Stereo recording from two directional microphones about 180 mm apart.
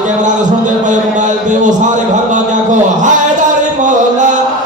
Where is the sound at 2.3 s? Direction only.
45° right (ahead or behind).